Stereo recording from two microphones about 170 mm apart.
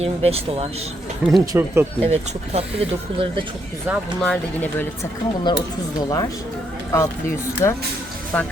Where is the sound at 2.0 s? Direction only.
40° right (ahead or behind).